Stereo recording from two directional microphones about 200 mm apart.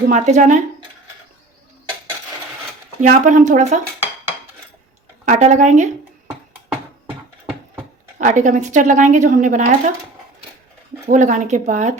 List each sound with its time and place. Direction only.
0.1 s speech: 40° right (ahead or behind)
3.0 s speech: 40° right (ahead or behind)
5.2 s speech: 40° right (ahead or behind)
8.2 s speech: 40° right (ahead or behind)
11.1 s speech: 40° right (ahead or behind)